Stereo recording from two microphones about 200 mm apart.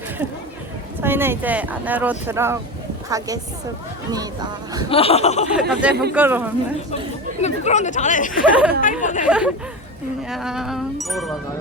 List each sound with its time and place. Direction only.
1.0 s speech: 10° right (ahead or behind)
4.9 s speech: 30° left (ahead or behind)
5.5 s speech: 5° right (ahead or behind)
5.9 s speech: 55° right (ahead or behind)
6.1 s speech: 10° right (ahead or behind)
7.4 s speech: 35° left (ahead or behind)
9.2 s speech: 5° right (ahead or behind)